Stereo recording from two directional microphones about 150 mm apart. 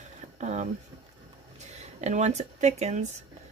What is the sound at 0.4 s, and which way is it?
Speech, 50° right (ahead or behind).